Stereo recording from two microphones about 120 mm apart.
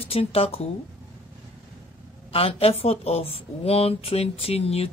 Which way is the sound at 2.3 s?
55° left (ahead or behind).